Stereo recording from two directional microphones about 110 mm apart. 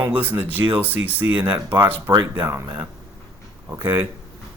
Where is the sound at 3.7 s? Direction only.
20° right (ahead or behind).